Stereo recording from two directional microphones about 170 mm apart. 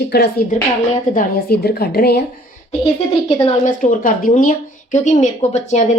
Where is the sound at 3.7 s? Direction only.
50° left (ahead or behind).